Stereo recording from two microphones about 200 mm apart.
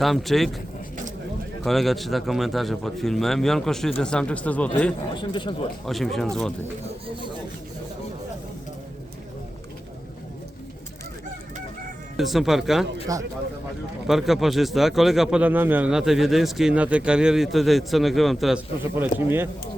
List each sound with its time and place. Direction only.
0.0 s speech: centre (ahead or behind)
1.6 s speech: centre (ahead or behind)
5.1 s speech: 25° left (ahead or behind)
5.8 s speech: centre (ahead or behind)
12.1 s speech: centre (ahead or behind)
13.1 s speech: 15° right (ahead or behind)
14.1 s speech: centre (ahead or behind)